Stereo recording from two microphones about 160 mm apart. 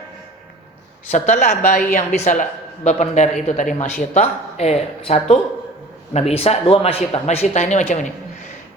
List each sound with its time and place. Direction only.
1.1 s a woman's voice: 50° left (ahead or behind)